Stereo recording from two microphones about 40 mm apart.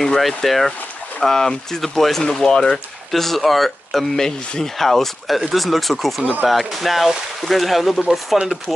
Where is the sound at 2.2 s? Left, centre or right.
Centre.